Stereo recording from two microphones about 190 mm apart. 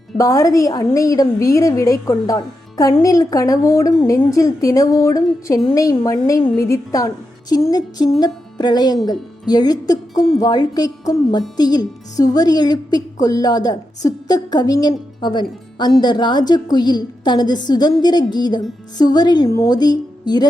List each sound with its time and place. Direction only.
0.2 s a woman's voice: 15° left (ahead or behind)